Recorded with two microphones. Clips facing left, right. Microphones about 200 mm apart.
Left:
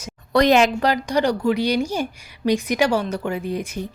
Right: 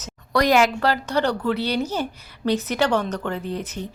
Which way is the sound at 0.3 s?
25° left (ahead or behind).